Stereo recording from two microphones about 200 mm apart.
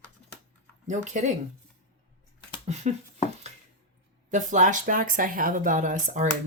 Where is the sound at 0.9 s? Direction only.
35° right (ahead or behind).